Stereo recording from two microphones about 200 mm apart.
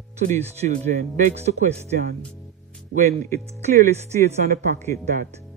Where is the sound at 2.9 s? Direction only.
35° right (ahead or behind).